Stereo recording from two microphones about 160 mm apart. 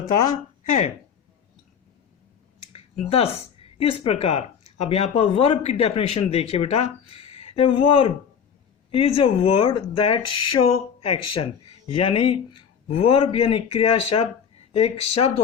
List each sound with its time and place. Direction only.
2.7 s speech: 35° left (ahead or behind)